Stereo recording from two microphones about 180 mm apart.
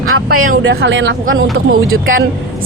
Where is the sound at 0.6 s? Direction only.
90° right.